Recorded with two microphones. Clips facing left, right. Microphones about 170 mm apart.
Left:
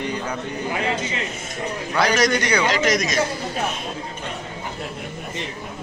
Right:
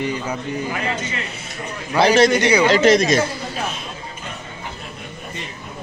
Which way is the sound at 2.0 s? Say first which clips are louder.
Right 6 dB; 30° right (ahead or behind).